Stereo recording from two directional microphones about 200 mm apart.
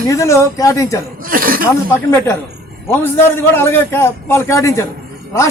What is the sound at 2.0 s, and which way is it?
Speech, 15° left (ahead or behind).